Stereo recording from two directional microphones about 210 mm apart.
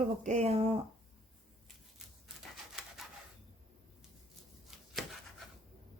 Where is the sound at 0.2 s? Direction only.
35° right (ahead or behind).